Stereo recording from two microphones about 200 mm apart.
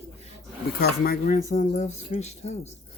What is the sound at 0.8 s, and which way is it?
Speech, 45° left (ahead or behind).